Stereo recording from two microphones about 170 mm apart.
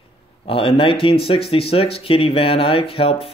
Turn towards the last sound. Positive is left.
turn(degrees=35)  # may be behind; listen again after turning